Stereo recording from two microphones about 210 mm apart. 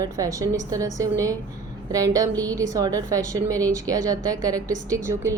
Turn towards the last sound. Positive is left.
turn(degrees=-15)  # may be behind; listen again after turning